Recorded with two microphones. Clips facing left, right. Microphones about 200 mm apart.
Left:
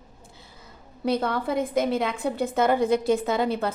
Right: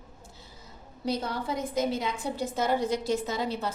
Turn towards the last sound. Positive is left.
turn(degrees=55)  # may be behind; listen again after turning